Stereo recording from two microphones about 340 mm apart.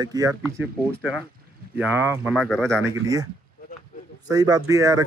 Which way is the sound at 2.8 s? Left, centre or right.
Centre.